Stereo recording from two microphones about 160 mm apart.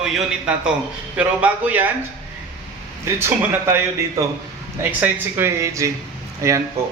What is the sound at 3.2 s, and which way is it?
Speech, 15° right (ahead or behind).